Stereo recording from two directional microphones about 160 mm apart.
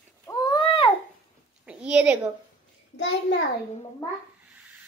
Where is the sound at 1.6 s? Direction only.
5° right (ahead or behind).